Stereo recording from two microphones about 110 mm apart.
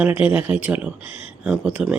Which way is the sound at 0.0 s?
15° right (ahead or behind).